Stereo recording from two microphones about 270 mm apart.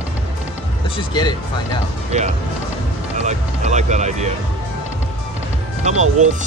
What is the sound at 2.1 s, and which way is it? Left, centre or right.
Speech, right.